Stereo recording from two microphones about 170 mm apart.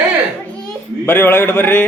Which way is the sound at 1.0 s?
10° left (ahead or behind).